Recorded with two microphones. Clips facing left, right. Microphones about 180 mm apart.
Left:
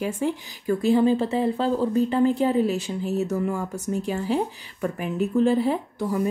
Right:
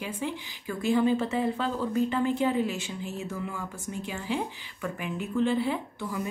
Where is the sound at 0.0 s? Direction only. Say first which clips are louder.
Left 7 dB; 40° left (ahead or behind).